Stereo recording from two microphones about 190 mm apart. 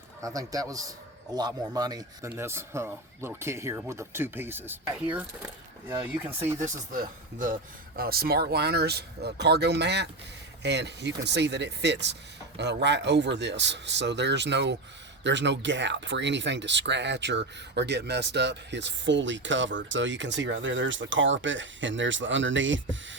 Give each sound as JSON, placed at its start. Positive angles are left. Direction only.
{"t": 0.2, "sound": "a man's voice", "side_deg": -15}
{"t": 6.9, "sound": "speech", "side_deg": -45}